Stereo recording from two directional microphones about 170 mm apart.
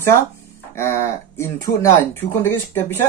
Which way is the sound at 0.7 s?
15° left (ahead or behind).